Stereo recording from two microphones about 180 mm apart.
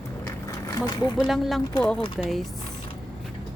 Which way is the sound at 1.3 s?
Centre (ahead or behind).